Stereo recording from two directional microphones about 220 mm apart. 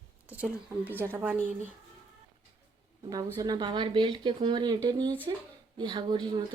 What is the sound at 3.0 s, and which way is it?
Speech, 15° right (ahead or behind).